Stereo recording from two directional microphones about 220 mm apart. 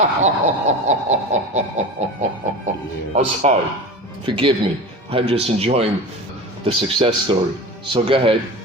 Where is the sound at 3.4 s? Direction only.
30° right (ahead or behind).